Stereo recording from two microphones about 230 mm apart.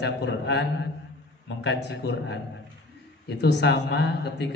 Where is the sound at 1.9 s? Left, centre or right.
Left.